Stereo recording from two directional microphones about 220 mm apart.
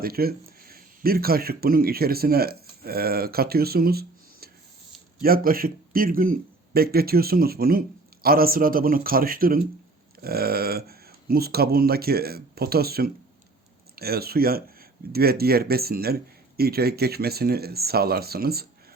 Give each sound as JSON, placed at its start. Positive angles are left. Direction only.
{"t": 0.0, "sound": "a man's voice", "side_deg": -45}